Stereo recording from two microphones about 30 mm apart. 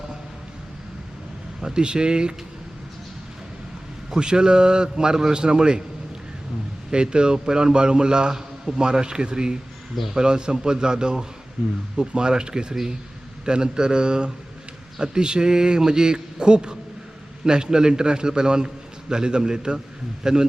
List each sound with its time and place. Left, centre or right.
1.6 s a man's voice: right
4.1 s a man's voice: right
6.9 s a man's voice: right